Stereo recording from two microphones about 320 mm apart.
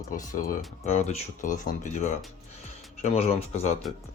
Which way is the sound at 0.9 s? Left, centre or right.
Left.